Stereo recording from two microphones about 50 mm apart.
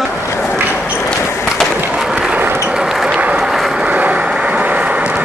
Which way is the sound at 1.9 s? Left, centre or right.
Centre.